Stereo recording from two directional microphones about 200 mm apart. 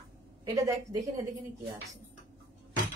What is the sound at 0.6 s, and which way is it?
Speech, 15° right (ahead or behind).